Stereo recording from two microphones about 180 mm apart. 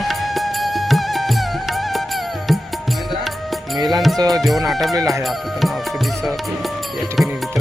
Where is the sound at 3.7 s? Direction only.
20° right (ahead or behind).